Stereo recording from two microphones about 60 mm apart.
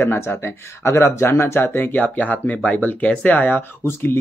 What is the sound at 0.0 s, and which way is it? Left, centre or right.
Speech, left.